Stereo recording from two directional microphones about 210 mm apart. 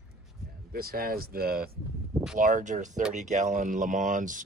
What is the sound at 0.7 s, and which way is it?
Speech, 45° right (ahead or behind).